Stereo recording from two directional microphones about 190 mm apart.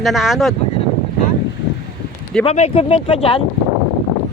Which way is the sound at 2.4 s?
35° left (ahead or behind).